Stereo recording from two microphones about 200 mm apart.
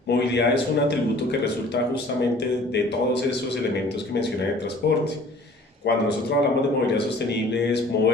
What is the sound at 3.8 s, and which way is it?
A man's voice, 55° left (ahead or behind).